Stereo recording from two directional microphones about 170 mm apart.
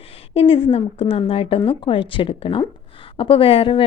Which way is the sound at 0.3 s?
30° left (ahead or behind).